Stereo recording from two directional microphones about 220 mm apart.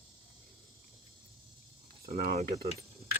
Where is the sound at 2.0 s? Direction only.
40° right (ahead or behind).